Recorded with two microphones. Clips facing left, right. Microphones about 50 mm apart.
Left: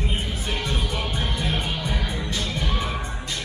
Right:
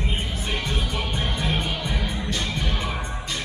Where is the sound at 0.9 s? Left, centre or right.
Centre.